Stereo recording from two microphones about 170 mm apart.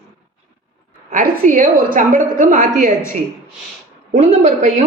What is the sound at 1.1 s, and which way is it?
A woman's voice, 50° right (ahead or behind).